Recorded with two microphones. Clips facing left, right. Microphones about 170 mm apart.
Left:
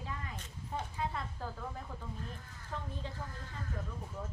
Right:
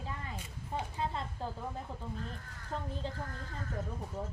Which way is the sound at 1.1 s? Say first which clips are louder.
Right 2 dB; 25° right (ahead or behind).